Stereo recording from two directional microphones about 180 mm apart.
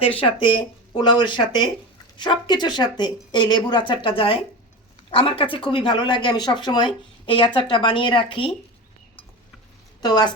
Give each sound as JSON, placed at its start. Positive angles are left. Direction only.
{"t": 0.0, "sound": "speech", "side_deg": 30}
{"t": 10.0, "sound": "speech", "side_deg": 20}